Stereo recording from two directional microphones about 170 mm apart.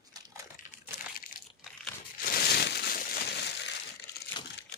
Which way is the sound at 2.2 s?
65° left (ahead or behind).